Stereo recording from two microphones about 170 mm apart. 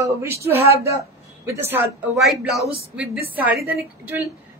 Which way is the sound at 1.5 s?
15° right (ahead or behind).